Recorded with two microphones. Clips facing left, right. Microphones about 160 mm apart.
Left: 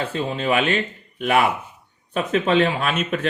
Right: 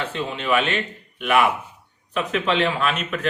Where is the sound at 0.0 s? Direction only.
40° left (ahead or behind).